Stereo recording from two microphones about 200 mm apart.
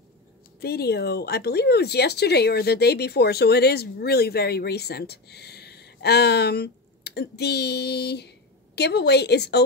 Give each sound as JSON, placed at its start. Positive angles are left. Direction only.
{"t": 0.6, "sound": "a woman's voice", "side_deg": 50}